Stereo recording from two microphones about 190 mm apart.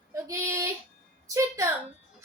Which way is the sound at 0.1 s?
15° right (ahead or behind).